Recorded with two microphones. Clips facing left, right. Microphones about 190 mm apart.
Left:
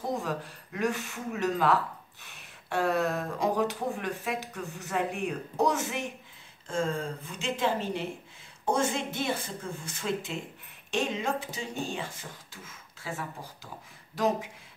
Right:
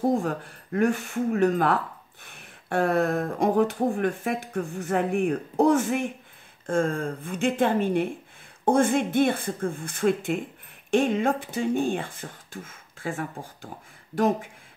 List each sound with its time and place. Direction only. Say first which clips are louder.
0.1 s speech: right 6 dB; 55° right (ahead or behind)